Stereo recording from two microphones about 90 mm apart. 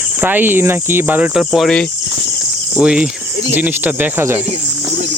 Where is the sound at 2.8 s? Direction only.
10° right (ahead or behind).